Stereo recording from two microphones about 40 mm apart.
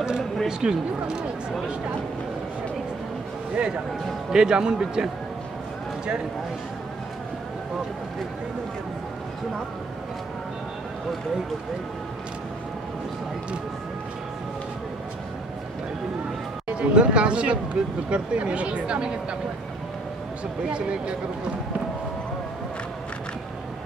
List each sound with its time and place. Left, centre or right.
0.5 s speech: centre
3.5 s speech: right
16.7 s speech: right